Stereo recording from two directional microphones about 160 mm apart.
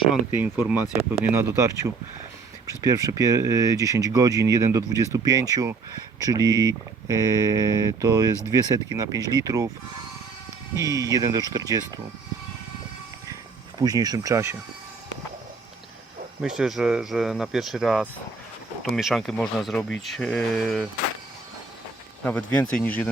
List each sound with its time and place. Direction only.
0.3 s speech: 15° right (ahead or behind)
10.8 s speech: 20° right (ahead or behind)
13.7 s speech: 25° right (ahead or behind)
16.4 s speech: 5° right (ahead or behind)
22.2 s speech: 10° left (ahead or behind)